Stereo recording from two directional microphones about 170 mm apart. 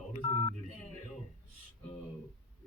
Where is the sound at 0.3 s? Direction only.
20° left (ahead or behind).